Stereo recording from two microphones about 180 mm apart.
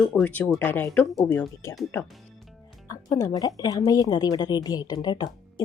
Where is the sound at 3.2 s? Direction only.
20° left (ahead or behind).